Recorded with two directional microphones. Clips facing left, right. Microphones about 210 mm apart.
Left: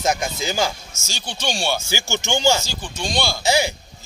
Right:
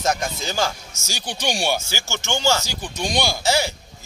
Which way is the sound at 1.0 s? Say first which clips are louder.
Right 1 dB; 15° right (ahead or behind).